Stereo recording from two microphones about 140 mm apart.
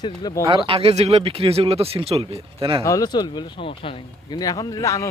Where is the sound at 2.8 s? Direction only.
25° left (ahead or behind).